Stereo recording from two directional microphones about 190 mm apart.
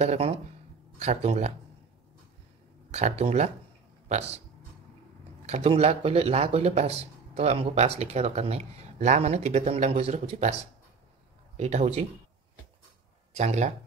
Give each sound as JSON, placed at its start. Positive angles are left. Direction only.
{"t": 0.0, "sound": "speech", "side_deg": -35}
{"t": 2.9, "sound": "speech", "side_deg": -35}
{"t": 5.5, "sound": "speech", "side_deg": -35}
{"t": 13.4, "sound": "speech", "side_deg": -40}